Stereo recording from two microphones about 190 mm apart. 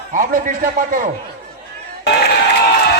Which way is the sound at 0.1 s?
45° right (ahead or behind).